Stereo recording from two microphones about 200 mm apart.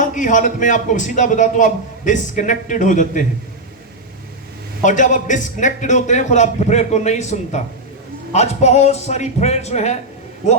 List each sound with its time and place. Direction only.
0.0 s a man's voice: 40° left (ahead or behind)
4.8 s a man's voice: 40° left (ahead or behind)